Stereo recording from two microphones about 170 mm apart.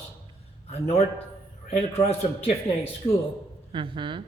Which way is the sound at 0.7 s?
40° left (ahead or behind).